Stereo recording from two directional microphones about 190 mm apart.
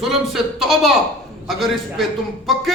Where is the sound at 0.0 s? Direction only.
Centre (ahead or behind).